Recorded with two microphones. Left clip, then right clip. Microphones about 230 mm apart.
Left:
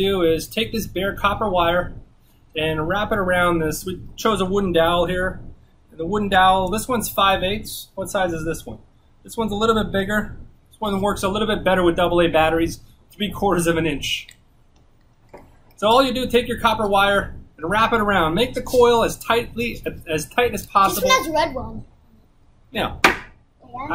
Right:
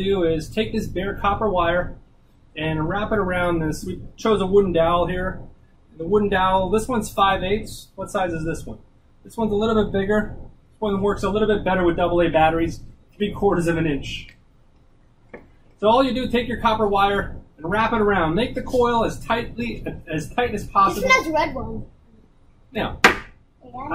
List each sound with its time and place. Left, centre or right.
0.0 s speech: centre
15.8 s speech: centre
21.1 s a child's voice: centre